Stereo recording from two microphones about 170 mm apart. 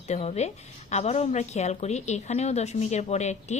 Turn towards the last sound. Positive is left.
turn(degrees=40)  # may be behind; listen again after turning